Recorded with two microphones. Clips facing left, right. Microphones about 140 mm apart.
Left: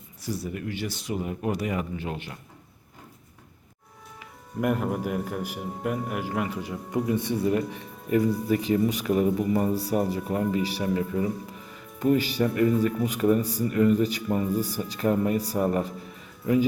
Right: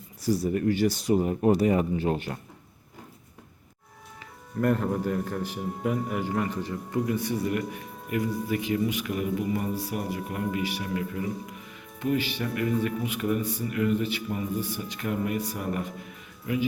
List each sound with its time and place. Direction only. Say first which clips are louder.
0.2 s speech: right 7 dB; 40° right (ahead or behind)
4.6 s a man's voice: right 1 dB; 10° left (ahead or behind)
7.0 s speech: left 3 dB; 25° left (ahead or behind)